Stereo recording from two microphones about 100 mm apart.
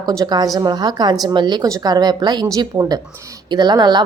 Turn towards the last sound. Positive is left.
turn(degrees=-45)  # may be behind; listen again after turning